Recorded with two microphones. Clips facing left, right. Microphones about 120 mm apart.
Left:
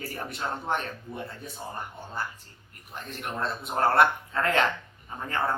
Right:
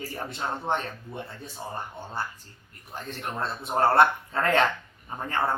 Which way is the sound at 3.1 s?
30° right (ahead or behind).